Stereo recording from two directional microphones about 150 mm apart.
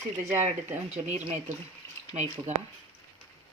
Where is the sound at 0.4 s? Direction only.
45° right (ahead or behind).